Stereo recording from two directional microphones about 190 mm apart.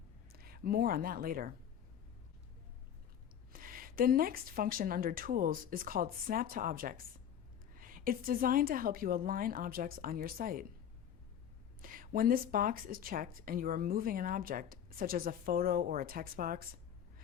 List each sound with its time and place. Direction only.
0.3 s speech: 50° right (ahead or behind)
3.5 s speech: 50° right (ahead or behind)
11.8 s speech: 45° right (ahead or behind)